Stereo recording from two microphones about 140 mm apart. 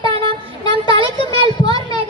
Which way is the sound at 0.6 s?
30° left (ahead or behind).